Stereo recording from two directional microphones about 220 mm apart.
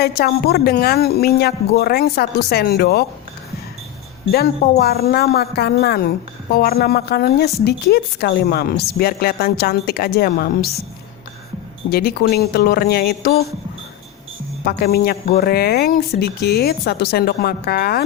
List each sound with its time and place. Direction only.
0.0 s speech: 45° left (ahead or behind)
4.3 s speech: 45° left (ahead or behind)
11.9 s speech: 45° left (ahead or behind)
14.6 s speech: 45° left (ahead or behind)